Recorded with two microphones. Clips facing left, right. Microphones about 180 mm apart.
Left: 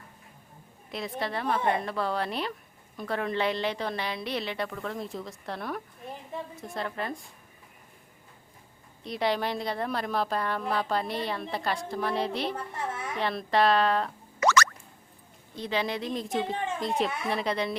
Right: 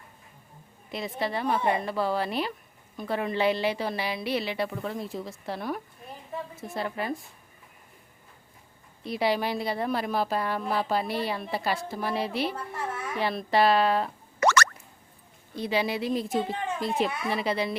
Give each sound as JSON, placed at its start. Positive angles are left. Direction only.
{"t": 0.9, "sound": "a woman's voice", "side_deg": 0}
{"t": 9.0, "sound": "a woman's voice", "side_deg": -5}
{"t": 14.3, "sound": "music", "side_deg": -55}
{"t": 15.5, "sound": "a woman's voice", "side_deg": -10}